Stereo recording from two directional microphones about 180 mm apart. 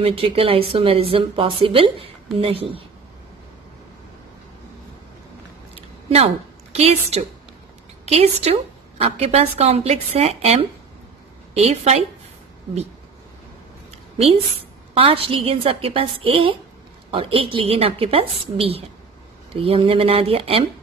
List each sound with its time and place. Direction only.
0.0 s speech: 30° right (ahead or behind)
5.8 s a sound: 35° right (ahead or behind)
8.0 s a woman's voice: 35° right (ahead or behind)
15.0 s speech: 30° right (ahead or behind)